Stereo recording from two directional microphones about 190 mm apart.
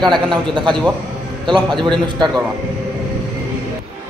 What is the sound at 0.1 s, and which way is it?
A man's voice, 25° right (ahead or behind).